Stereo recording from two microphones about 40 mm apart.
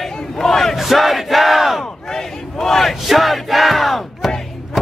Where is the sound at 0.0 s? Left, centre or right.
Centre.